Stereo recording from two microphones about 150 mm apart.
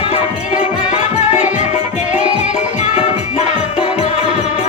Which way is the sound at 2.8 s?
50° left (ahead or behind).